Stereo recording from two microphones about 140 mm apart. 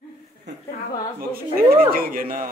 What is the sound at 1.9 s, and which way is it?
Speech, 90° right.